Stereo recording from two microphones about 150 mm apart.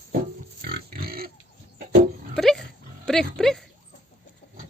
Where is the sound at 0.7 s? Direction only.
90° right.